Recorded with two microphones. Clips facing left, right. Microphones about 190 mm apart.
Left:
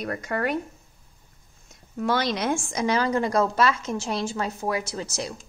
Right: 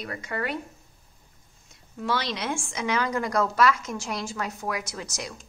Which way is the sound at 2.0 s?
50° left (ahead or behind).